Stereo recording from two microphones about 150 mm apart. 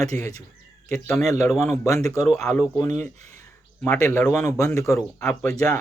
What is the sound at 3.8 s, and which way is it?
Speech, 15° left (ahead or behind).